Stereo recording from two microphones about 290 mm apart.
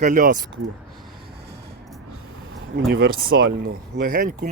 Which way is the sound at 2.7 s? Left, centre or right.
Right.